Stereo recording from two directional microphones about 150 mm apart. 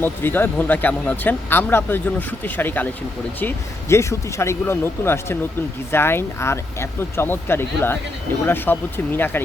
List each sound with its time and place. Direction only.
0.0 s speech: 15° left (ahead or behind)